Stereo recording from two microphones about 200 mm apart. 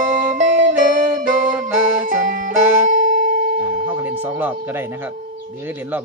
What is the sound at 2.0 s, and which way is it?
Music, 40° right (ahead or behind).